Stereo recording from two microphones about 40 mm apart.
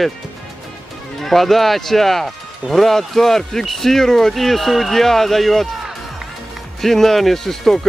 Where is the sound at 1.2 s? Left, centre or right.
Centre.